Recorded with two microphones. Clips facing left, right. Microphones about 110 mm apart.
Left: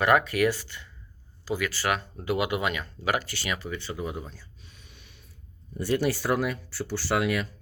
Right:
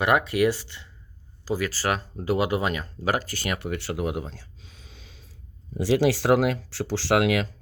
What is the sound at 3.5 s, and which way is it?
Speech, 65° right (ahead or behind).